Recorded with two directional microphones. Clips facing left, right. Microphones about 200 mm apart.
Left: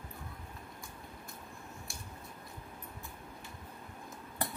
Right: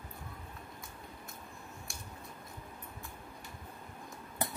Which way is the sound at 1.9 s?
Centre (ahead or behind).